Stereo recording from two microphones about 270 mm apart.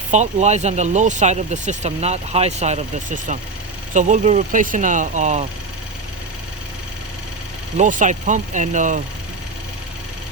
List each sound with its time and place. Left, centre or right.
0.1 s speech: right
7.8 s speech: right